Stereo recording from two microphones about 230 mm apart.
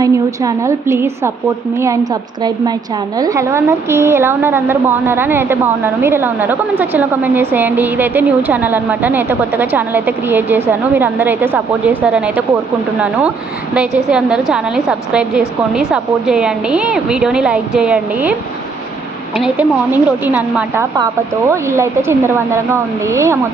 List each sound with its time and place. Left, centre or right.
0.0 s a woman's voice: centre
14.1 s speech: centre
19.4 s a woman's voice: centre